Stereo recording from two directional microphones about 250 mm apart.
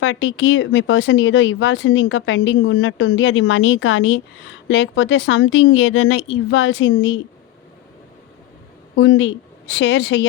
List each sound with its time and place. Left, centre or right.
0.0 s speech: left
9.0 s speech: left